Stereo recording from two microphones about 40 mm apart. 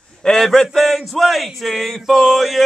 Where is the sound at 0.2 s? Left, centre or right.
Centre.